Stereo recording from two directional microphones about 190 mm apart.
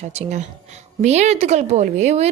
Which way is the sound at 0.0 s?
35° right (ahead or behind).